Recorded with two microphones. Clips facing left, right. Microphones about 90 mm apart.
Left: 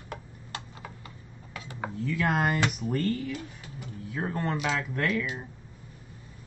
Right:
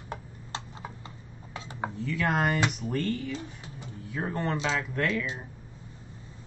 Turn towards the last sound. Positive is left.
turn(degrees=-25)  # may be behind; listen again after turning